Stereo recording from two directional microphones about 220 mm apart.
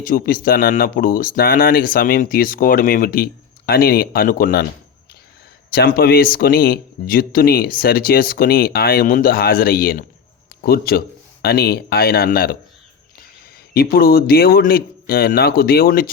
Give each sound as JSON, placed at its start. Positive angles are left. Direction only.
{"t": 0.0, "sound": "speech", "side_deg": 40}
{"t": 5.7, "sound": "speech", "side_deg": 45}
{"t": 13.7, "sound": "speech", "side_deg": 40}